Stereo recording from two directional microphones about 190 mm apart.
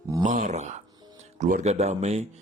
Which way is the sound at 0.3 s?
40° right (ahead or behind).